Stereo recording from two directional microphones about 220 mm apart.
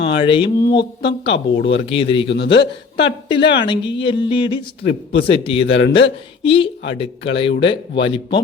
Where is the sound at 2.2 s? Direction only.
50° left (ahead or behind).